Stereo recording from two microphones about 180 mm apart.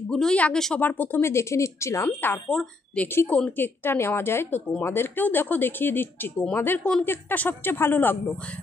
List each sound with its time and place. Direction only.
0.1 s a woman's voice: 5° left (ahead or behind)